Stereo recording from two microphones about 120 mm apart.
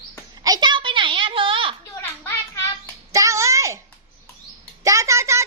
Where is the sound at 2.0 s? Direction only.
20° left (ahead or behind).